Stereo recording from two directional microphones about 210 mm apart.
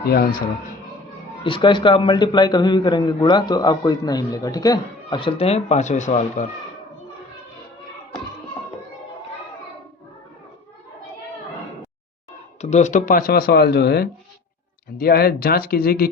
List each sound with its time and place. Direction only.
0.1 s speech: 45° left (ahead or behind)
1.5 s a man's voice: 25° left (ahead or behind)
12.6 s speech: 35° left (ahead or behind)